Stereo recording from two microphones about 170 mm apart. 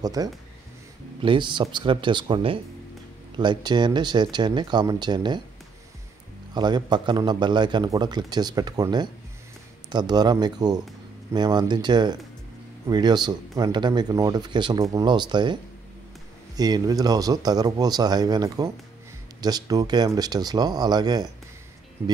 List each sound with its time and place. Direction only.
0.0 s speech: 20° right (ahead or behind)
6.5 s speech: 25° right (ahead or behind)
22.0 s speech: 15° right (ahead or behind)